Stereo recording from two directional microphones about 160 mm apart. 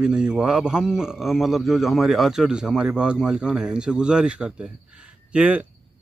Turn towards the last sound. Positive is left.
turn(degrees=-10)  # may be behind; listen again after turning